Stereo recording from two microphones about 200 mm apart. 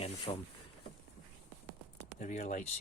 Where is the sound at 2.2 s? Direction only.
40° left (ahead or behind).